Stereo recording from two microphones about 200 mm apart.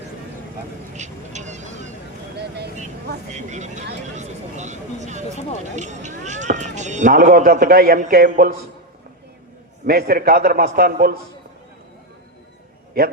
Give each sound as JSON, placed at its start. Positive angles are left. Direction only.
{"t": 0.9, "sound": "a sound", "side_deg": -35}
{"t": 3.3, "sound": "speech", "side_deg": -35}
{"t": 4.2, "sound": "vehicle", "side_deg": -35}
{"t": 5.7, "sound": "speech", "side_deg": -35}
{"t": 9.8, "sound": "a man's voice", "side_deg": -50}